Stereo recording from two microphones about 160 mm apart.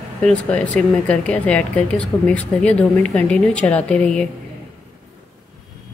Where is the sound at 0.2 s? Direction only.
5° left (ahead or behind).